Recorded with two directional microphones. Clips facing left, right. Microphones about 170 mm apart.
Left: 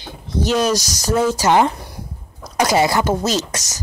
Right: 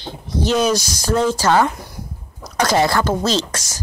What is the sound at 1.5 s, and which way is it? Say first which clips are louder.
A woman's voice: left 1 dB; 20° left (ahead or behind).